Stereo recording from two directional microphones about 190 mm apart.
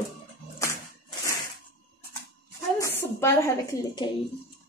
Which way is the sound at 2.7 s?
15° left (ahead or behind).